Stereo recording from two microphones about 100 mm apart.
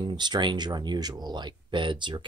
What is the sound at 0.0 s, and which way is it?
Speech, 45° right (ahead or behind).